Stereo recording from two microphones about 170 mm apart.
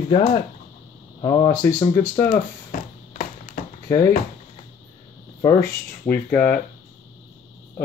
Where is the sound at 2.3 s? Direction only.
50° left (ahead or behind).